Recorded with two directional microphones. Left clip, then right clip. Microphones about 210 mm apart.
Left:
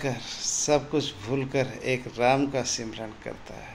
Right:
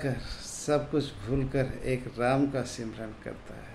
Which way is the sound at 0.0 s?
10° right (ahead or behind).